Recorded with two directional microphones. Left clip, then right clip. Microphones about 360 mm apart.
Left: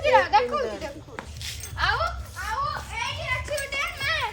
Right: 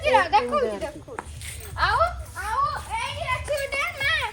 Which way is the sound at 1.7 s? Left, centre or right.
Centre.